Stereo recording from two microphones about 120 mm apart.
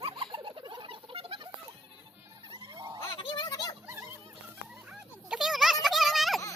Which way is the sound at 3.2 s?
35° left (ahead or behind).